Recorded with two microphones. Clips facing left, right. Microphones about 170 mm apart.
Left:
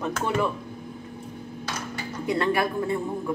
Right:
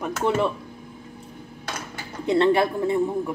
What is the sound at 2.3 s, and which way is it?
Speech, 25° right (ahead or behind).